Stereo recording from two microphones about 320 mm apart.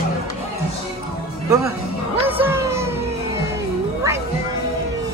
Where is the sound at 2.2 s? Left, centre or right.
Centre.